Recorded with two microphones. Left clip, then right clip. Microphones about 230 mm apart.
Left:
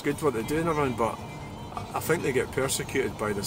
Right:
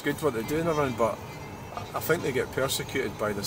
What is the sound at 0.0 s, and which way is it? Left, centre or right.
Speech, centre.